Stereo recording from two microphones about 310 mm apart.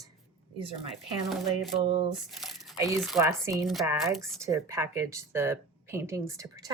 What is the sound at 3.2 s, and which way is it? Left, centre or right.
Speech, centre.